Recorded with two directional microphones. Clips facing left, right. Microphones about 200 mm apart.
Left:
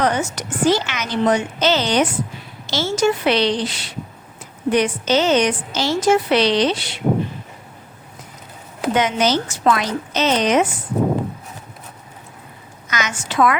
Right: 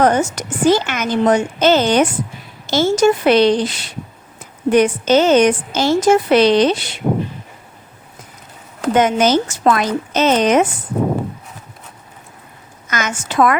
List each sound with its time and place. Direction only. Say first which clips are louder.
0.0 s a woman's voice: right 5 dB; 50° right (ahead or behind)
9.0 s a woman's voice: right 5 dB; 50° right (ahead or behind)
12.9 s a woman's voice: right 3 dB; 50° right (ahead or behind)